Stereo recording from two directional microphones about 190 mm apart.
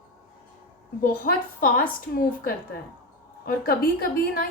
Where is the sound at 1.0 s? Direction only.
50° left (ahead or behind).